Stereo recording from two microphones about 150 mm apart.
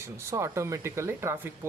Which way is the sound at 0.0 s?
20° right (ahead or behind).